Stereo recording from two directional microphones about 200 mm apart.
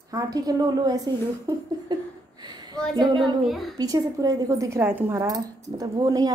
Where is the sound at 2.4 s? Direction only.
20° right (ahead or behind).